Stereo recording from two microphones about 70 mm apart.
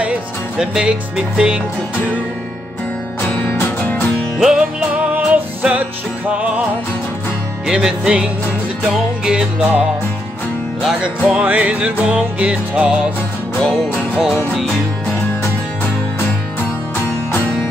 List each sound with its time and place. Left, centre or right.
0.0 s music: centre
3.4 s music: left
3.8 s music: left
4.4 s music: centre
4.9 s music: right
7.6 s music: centre
11.0 s music: centre
13.6 s music: centre